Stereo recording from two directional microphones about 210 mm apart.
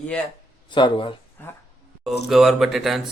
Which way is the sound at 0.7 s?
20° left (ahead or behind).